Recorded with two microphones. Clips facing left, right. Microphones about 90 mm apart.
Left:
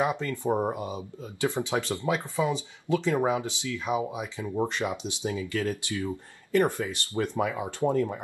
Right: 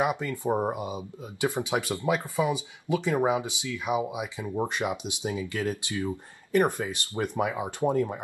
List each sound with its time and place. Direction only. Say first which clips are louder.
0.0 s speech: even; 15° right (ahead or behind)